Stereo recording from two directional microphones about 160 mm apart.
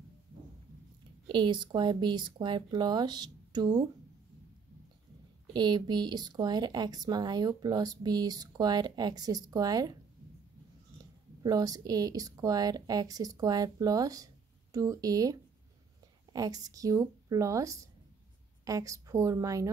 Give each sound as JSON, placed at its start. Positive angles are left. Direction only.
{"t": 1.3, "sound": "speech", "side_deg": -30}
{"t": 5.5, "sound": "speech", "side_deg": -25}
{"t": 11.4, "sound": "speech", "side_deg": -25}
{"t": 16.3, "sound": "speech", "side_deg": -25}